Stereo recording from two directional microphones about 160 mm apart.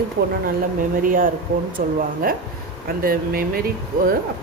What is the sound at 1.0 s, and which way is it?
Speech, 60° right (ahead or behind).